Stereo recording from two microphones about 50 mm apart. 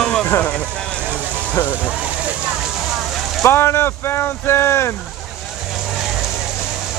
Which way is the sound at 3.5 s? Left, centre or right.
Left.